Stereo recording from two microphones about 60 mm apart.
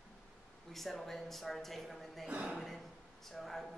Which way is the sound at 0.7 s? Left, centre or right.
Centre.